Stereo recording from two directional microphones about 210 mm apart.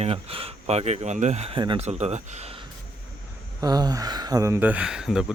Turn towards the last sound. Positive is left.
turn(degrees=-5)  # may be behind; listen again after turning